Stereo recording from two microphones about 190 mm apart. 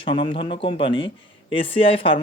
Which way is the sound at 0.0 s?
25° left (ahead or behind).